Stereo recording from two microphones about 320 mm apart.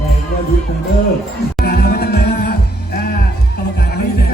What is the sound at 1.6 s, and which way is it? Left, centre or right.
Music, left.